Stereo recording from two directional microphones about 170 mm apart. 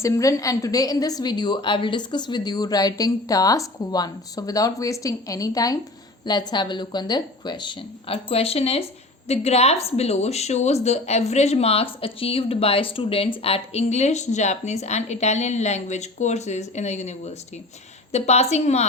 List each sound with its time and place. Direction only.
0.0 s a woman's voice: 20° left (ahead or behind); by 18.9 s 40° left (ahead or behind)